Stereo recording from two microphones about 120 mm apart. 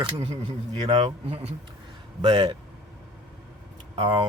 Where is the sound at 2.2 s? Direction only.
40° right (ahead or behind).